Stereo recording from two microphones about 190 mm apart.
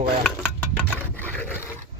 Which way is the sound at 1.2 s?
10° left (ahead or behind).